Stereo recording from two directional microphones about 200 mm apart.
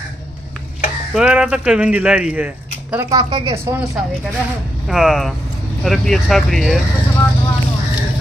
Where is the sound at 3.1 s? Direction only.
20° right (ahead or behind).